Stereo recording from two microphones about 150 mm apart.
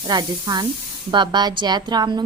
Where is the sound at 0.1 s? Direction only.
25° right (ahead or behind).